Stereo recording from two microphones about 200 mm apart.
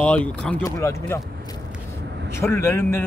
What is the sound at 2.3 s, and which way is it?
Speech, 10° left (ahead or behind).